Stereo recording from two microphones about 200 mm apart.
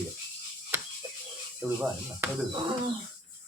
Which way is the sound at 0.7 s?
15° right (ahead or behind).